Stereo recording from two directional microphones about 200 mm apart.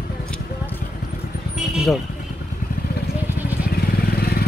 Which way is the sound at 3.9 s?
50° left (ahead or behind).